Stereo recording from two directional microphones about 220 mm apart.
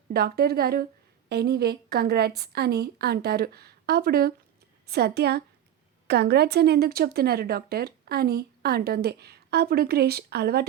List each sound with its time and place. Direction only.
0.1 s speech: 45° right (ahead or behind)